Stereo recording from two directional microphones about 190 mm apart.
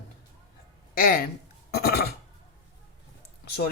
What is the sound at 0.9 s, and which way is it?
Speech, 50° left (ahead or behind).